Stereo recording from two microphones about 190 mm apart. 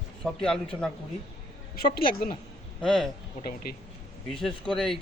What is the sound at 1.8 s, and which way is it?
Speech, 50° left (ahead or behind).